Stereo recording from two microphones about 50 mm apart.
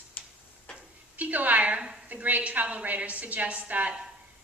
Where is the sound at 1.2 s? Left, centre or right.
Right.